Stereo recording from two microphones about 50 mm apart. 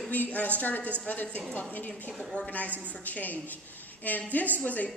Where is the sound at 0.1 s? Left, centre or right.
Left.